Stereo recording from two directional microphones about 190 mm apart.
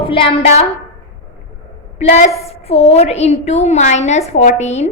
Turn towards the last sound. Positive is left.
turn(degrees=35)  # may be behind; listen again after turning